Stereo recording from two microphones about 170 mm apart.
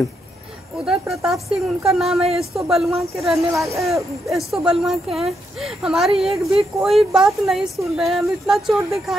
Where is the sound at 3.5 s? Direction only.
15° right (ahead or behind).